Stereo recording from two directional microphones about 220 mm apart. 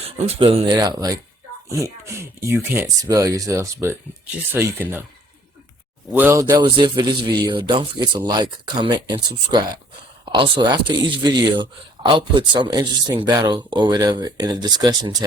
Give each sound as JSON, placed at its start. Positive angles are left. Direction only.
{"t": 0.0, "sound": "speech", "side_deg": -25}
{"t": 6.1, "sound": "speech", "side_deg": -10}